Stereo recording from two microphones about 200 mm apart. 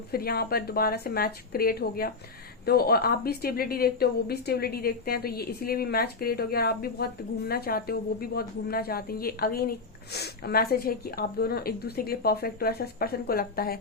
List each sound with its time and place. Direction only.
0.1 s a woman's voice: 50° left (ahead or behind)